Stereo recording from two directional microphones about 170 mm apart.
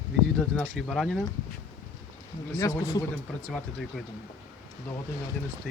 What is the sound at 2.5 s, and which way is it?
Speech, 20° left (ahead or behind).